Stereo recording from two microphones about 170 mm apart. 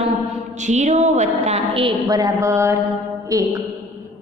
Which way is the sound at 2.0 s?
20° right (ahead or behind).